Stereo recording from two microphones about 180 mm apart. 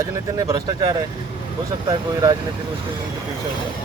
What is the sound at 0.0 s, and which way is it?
Speech, 20° right (ahead or behind).